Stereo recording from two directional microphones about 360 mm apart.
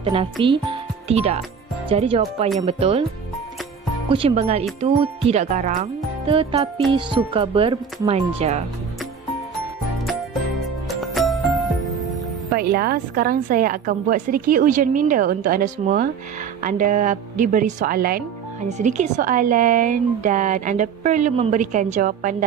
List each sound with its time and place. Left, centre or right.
0.0 s speech: centre
4.1 s speech: centre
10.9 s music: centre
12.7 s a woman's voice: right